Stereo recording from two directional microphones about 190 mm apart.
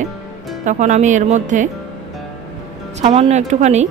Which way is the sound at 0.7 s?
40° right (ahead or behind).